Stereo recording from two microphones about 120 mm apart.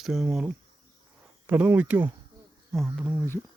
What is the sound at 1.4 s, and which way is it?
Speech, 15° right (ahead or behind).